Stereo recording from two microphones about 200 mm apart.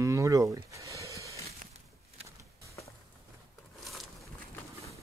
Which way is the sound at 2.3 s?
15° right (ahead or behind).